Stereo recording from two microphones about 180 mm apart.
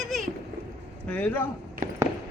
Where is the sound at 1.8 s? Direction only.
45° right (ahead or behind).